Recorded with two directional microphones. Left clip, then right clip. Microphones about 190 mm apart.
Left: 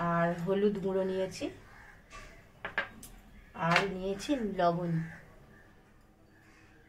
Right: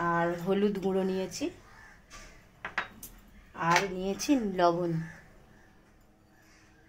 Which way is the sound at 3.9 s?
45° right (ahead or behind).